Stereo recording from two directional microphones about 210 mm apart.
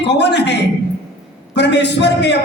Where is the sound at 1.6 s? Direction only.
55° left (ahead or behind).